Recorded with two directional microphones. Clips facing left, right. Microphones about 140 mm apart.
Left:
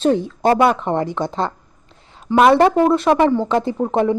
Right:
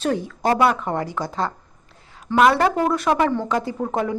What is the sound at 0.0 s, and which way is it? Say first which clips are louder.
A woman's voice: left 6 dB; 25° left (ahead or behind).